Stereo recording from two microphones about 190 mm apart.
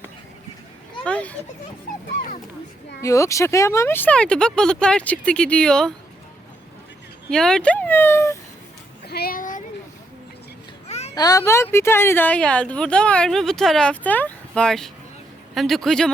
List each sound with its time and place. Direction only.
1.0 s speech: 5° left (ahead or behind)
3.0 s speech: 15° left (ahead or behind)
7.3 s speech: 5° left (ahead or behind)
9.0 s child singing: 55° left (ahead or behind)
10.8 s children playing: 35° left (ahead or behind)
11.1 s speech: 20° left (ahead or behind); by 16.1 s centre (ahead or behind)